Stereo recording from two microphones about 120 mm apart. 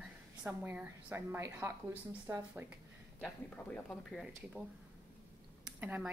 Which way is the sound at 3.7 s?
10° left (ahead or behind).